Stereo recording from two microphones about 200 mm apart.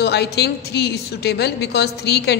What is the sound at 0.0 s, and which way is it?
A woman's voice, 55° left (ahead or behind).